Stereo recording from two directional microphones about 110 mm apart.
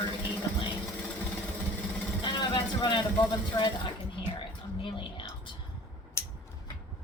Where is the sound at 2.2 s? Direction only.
40° left (ahead or behind).